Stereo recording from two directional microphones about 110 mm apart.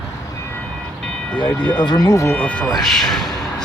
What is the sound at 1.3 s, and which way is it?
Speech, 15° left (ahead or behind).